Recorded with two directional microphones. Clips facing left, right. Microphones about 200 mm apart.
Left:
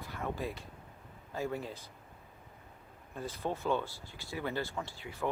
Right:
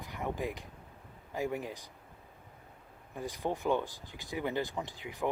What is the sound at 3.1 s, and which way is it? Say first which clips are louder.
Speech: right 2 dB; 15° right (ahead or behind).